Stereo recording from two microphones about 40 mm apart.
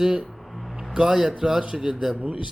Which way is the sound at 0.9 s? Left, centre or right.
Centre.